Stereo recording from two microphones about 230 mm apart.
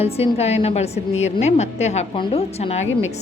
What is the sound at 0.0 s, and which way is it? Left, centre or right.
A woman's voice, left.